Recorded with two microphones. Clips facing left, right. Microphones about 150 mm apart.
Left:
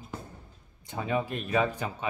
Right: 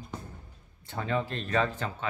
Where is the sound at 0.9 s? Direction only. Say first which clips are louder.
Left 1 dB; 15° left (ahead or behind).